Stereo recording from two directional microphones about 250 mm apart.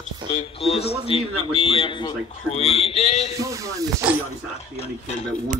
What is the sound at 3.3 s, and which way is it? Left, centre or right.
Speech, centre.